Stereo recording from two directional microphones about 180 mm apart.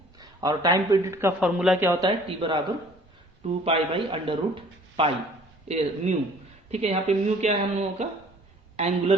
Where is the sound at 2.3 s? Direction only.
25° right (ahead or behind).